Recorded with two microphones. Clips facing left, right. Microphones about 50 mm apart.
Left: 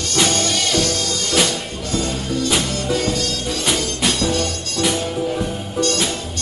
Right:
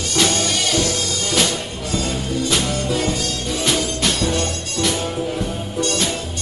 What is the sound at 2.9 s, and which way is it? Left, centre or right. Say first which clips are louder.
Music: left 1 dB; centre.